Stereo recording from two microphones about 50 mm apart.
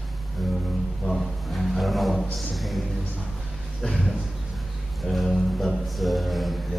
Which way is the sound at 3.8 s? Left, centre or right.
Centre.